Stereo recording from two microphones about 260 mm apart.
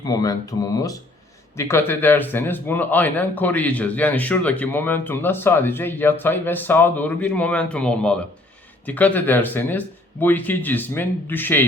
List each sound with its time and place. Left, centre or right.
0.0 s speech: centre